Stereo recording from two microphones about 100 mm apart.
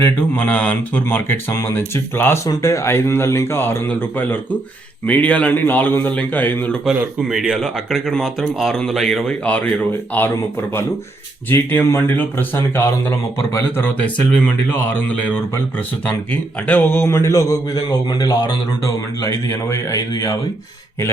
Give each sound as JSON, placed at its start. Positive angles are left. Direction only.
{"t": 0.3, "sound": "a man's voice", "side_deg": 15}
{"t": 5.0, "sound": "a man's voice", "side_deg": 15}
{"t": 6.8, "sound": "a man's voice", "side_deg": -5}
{"t": 11.5, "sound": "a man's voice", "side_deg": 20}
{"t": 19.2, "sound": "a man's voice", "side_deg": 30}